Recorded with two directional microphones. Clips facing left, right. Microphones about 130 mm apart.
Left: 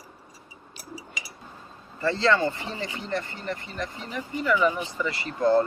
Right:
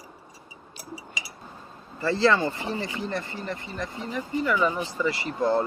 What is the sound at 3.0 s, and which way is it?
Speech, 25° right (ahead or behind).